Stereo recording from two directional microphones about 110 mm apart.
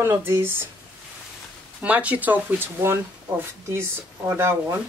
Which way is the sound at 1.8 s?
15° right (ahead or behind).